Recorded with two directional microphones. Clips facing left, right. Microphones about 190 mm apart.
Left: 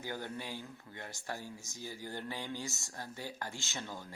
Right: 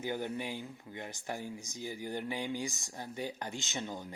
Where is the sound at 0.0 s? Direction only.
15° right (ahead or behind).